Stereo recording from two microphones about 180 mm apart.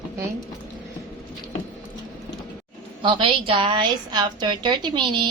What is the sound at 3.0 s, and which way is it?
A woman's voice, 25° right (ahead or behind).